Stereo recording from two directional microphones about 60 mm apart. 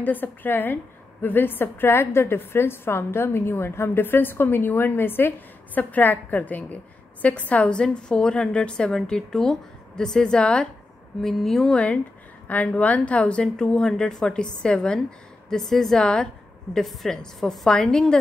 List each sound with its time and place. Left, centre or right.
0.0 s a woman's voice: left; by 11.7 s centre
11.7 s a woman's voice: centre